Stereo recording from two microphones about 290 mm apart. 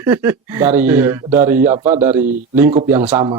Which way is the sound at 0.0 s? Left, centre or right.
Centre.